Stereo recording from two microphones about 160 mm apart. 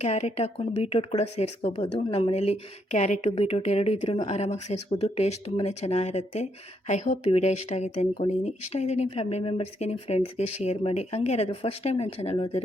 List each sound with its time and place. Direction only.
0.0 s speech: 40° left (ahead or behind)